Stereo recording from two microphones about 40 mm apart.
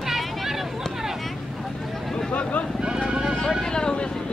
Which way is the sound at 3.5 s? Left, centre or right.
Centre.